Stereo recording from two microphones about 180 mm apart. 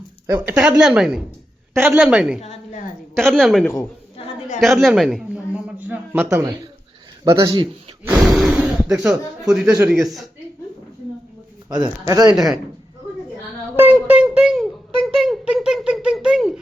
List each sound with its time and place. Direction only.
0.3 s a woman's voice: 20° right (ahead or behind)
0.8 s a woman's voice: 5° right (ahead or behind)
2.4 s a woman's voice: 35° left (ahead or behind)
3.2 s a woman's voice: centre (ahead or behind)
4.2 s a sound: 40° left (ahead or behind)
4.6 s a man's voice: centre (ahead or behind); by 8.2 s 20° right (ahead or behind)
8.2 s a woman's voice: centre (ahead or behind)
11.7 s a man's voice: 20° right (ahead or behind)
13.7 s a sound: 10° right (ahead or behind)